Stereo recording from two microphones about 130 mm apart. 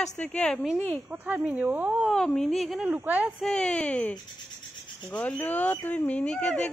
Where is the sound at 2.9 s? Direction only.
15° right (ahead or behind).